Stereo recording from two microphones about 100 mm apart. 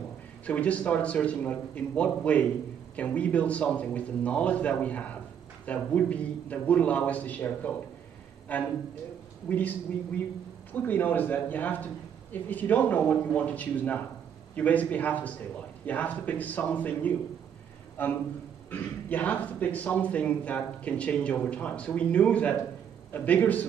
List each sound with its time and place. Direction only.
0.5 s a man's voice: 10° left (ahead or behind)